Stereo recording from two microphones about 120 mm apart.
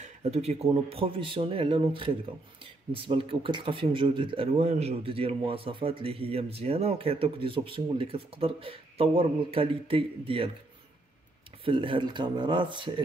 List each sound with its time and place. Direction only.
0.0 s speech: 65° right (ahead or behind)
0.8 s a man's voice: 50° right (ahead or behind)
4.6 s a man's voice: 65° right (ahead or behind); by 10.5 s 50° right (ahead or behind)
11.6 s a man's voice: 45° right (ahead or behind)